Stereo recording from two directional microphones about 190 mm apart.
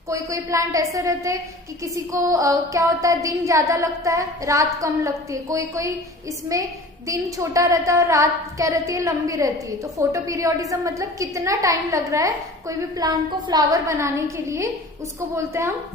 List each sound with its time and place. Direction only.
0.1 s a woman's voice: 15° right (ahead or behind)